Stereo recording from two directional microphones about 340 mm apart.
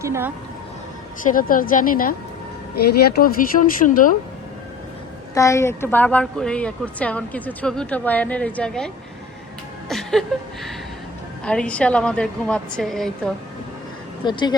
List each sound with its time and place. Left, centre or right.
0.0 s speech: centre
1.2 s speech: left
5.3 s speech: centre
9.9 s a sound: centre
11.4 s speech: centre
14.3 s speech: centre